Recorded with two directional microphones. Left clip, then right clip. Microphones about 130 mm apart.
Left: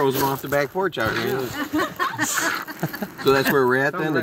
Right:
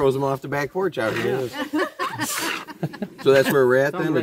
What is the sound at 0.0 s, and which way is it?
Speech, 40° right (ahead or behind).